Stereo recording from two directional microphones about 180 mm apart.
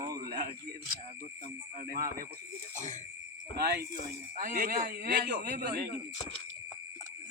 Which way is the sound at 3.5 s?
60° right (ahead or behind).